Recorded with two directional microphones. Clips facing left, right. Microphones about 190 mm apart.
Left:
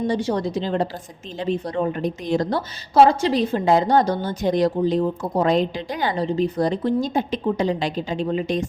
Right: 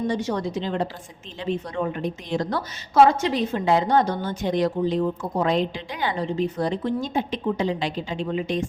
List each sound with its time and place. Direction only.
0.1 s a woman's voice: 30° left (ahead or behind)